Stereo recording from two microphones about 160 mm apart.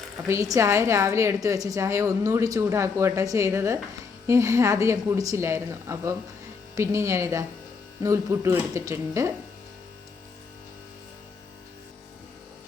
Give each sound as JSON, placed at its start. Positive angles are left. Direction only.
{"t": 0.3, "sound": "a woman's voice", "side_deg": -20}